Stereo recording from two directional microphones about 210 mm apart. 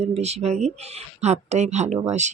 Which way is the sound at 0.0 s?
30° right (ahead or behind).